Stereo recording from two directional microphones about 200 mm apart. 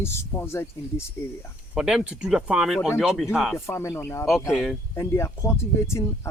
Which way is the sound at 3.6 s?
15° left (ahead or behind).